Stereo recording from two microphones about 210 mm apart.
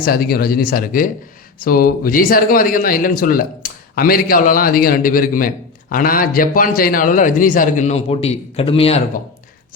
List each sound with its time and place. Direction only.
0.0 s a man's voice: 45° left (ahead or behind); by 9.2 s 30° left (ahead or behind)